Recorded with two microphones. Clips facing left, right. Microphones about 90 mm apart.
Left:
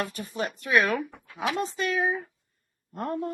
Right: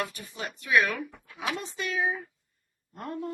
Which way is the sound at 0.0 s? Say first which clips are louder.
Left 4 dB; 40° left (ahead or behind).